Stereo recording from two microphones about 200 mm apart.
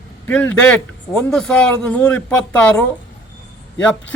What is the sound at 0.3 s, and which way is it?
A man's voice, 5° left (ahead or behind).